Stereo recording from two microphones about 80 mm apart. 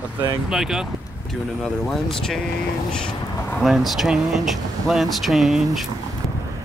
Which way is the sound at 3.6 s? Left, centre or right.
Centre.